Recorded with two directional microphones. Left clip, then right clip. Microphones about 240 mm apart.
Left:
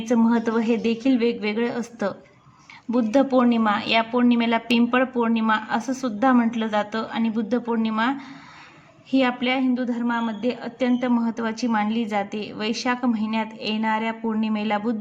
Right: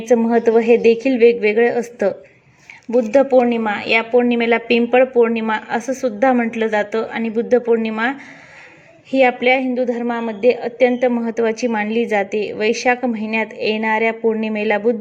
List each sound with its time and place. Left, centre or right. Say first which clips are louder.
0.0 s a woman's voice: right 8 dB; centre
0.6 s a woman's voice: right 11 dB; left
1.4 s a woman's voice: right 11 dB; centre
9.5 s a woman's voice: right 8 dB; centre
10.8 s a woman's voice: right 9 dB; left
11.2 s a woman's voice: right 8 dB; centre